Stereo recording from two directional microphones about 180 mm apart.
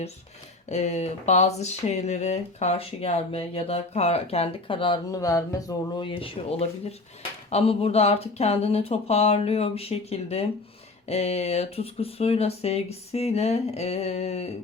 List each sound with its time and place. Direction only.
0.7 s speech: 40° left (ahead or behind); by 6.1 s 20° left (ahead or behind)
6.1 s speech: 30° left (ahead or behind)